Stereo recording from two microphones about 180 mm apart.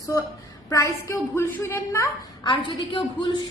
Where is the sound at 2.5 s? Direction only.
30° left (ahead or behind).